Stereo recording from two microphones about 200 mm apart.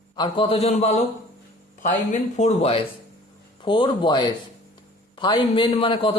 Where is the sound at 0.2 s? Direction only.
25° left (ahead or behind).